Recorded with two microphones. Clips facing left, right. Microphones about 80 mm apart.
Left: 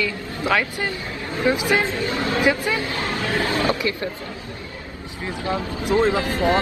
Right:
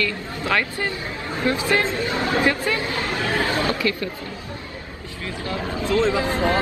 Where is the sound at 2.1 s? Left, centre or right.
Right.